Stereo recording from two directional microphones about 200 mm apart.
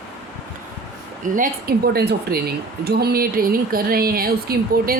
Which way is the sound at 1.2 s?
40° right (ahead or behind).